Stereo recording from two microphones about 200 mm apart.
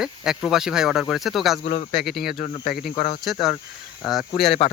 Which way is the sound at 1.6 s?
45° left (ahead or behind).